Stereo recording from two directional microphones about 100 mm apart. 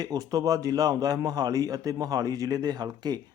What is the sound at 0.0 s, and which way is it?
A man's voice, 40° right (ahead or behind).